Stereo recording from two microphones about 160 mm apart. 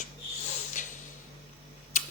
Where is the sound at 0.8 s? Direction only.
55° left (ahead or behind).